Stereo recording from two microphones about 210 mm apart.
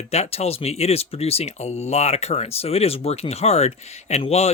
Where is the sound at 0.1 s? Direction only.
30° left (ahead or behind).